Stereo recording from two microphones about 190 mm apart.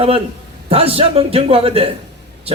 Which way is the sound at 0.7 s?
30° right (ahead or behind).